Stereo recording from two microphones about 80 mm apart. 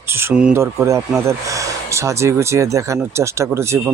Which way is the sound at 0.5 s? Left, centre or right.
Right.